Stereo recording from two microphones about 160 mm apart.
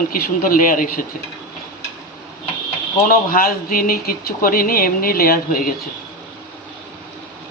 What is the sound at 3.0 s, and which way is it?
Speech, 65° left (ahead or behind).